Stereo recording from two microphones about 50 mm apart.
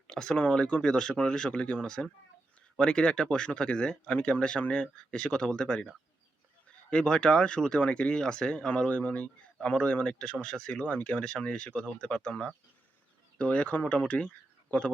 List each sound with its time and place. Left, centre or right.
0.1 s speech: centre
6.9 s speech: centre